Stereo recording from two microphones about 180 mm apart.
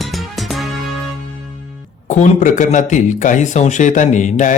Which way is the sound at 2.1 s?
45° left (ahead or behind).